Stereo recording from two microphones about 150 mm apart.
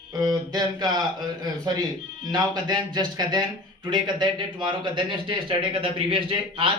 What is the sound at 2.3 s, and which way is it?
A man's voice, 25° right (ahead or behind).